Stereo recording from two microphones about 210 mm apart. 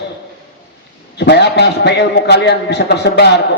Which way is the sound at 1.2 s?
55° left (ahead or behind).